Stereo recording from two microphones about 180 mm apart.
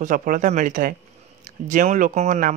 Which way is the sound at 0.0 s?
50° right (ahead or behind).